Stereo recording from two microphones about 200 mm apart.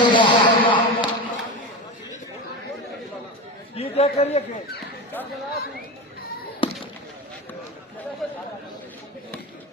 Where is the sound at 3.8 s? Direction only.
30° left (ahead or behind).